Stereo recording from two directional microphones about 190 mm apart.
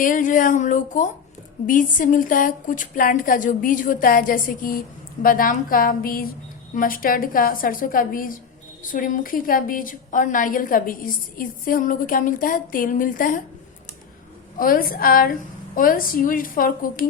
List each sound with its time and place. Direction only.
0.0 s a woman's voice: 45° left (ahead or behind)
14.6 s a woman's voice: 50° left (ahead or behind)